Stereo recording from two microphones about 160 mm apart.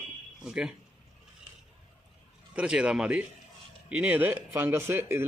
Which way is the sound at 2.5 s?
5° right (ahead or behind).